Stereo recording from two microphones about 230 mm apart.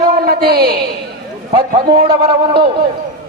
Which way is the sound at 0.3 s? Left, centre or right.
Right.